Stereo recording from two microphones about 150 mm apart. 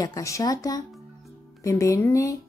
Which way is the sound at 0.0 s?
20° left (ahead or behind).